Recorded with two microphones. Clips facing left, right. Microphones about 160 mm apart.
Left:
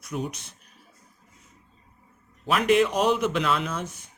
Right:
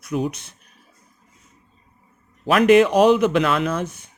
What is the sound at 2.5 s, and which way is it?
Speech, 85° right.